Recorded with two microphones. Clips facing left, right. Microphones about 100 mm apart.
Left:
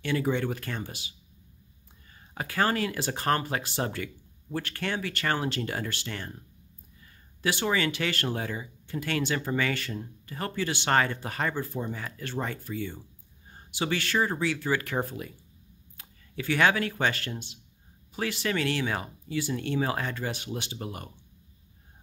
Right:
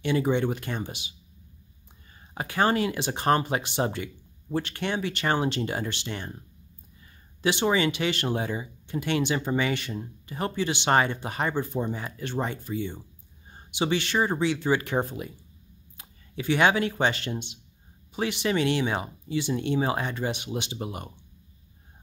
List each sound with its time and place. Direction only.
0.0 s speech: 20° right (ahead or behind)
2.1 s speech: 20° right (ahead or behind)
7.4 s speech: 20° right (ahead or behind)